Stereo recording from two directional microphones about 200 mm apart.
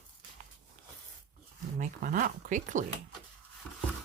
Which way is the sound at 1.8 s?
40° right (ahead or behind).